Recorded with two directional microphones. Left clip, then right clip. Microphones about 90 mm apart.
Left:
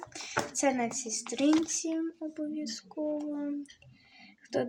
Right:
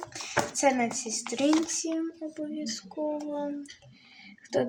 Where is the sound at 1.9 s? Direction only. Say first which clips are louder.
Right 2 dB; 40° left (ahead or behind).